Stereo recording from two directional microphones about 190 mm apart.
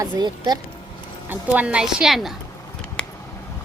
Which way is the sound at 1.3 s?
5° right (ahead or behind).